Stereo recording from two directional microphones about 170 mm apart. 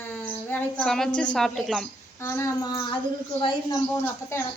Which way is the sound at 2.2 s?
15° left (ahead or behind).